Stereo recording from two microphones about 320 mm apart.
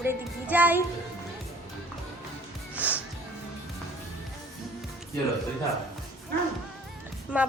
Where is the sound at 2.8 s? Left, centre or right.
Centre.